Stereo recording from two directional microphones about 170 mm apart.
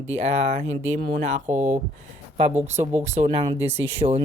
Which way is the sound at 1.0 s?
70° right (ahead or behind).